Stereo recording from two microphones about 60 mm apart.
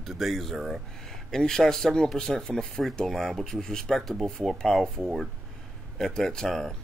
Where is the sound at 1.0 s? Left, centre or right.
Centre.